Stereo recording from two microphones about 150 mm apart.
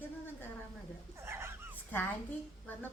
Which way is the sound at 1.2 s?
15° right (ahead or behind).